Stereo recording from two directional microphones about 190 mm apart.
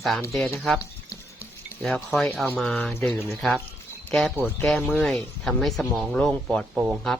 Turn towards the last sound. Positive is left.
turn(degrees=-5)  # may be behind; listen again after turning